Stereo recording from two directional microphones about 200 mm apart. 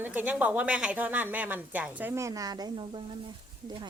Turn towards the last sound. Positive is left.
turn(degrees=-20)  # may be behind; listen again after turning